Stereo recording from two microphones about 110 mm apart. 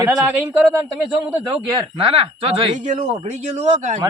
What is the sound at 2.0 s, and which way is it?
Speech, 55° right (ahead or behind).